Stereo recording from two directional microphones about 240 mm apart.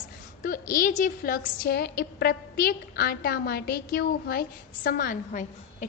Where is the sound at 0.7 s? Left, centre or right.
Left.